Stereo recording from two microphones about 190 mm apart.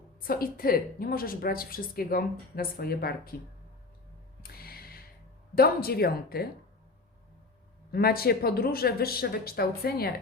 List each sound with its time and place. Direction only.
0.2 s a woman's voice: 50° left (ahead or behind)
4.4 s music: 55° left (ahead or behind)
5.5 s a woman's voice: 55° left (ahead or behind)
7.9 s a woman's voice: 55° left (ahead or behind)